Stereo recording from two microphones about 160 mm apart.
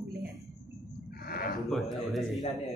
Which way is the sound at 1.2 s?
65° left (ahead or behind).